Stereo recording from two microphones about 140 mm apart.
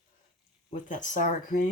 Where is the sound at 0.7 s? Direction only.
65° left (ahead or behind).